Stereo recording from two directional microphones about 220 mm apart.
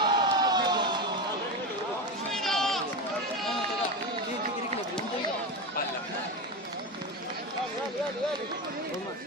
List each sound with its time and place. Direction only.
0.0 s crowd: 20° right (ahead or behind)
2.3 s run: centre (ahead or behind)